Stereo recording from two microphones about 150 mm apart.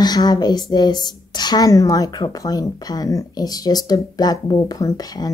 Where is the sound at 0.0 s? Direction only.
25° left (ahead or behind).